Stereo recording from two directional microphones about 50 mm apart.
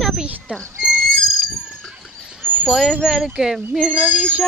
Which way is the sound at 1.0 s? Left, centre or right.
Centre.